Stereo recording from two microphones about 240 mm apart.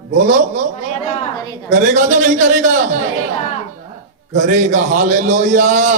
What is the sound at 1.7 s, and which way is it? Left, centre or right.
A man's voice, right.